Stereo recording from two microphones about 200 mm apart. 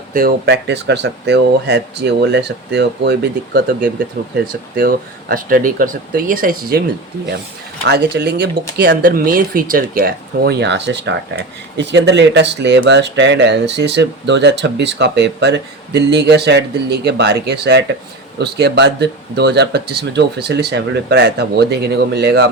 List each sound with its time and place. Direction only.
0.1 s speech: 45° right (ahead or behind)
7.9 s speech: 55° right (ahead or behind)